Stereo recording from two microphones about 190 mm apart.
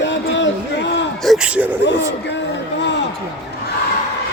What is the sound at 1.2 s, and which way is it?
Speech, centre (ahead or behind).